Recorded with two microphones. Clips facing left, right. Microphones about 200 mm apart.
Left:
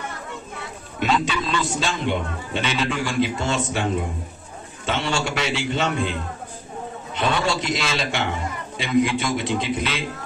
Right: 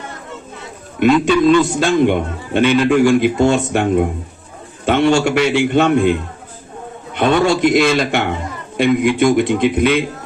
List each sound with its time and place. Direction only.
0.9 s a man's voice: 55° right (ahead or behind)